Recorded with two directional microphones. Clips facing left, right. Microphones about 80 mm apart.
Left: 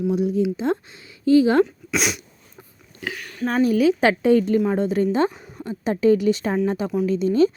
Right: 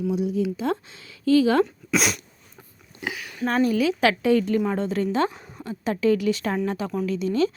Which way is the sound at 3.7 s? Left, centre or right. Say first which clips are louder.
Left 4 dB; left.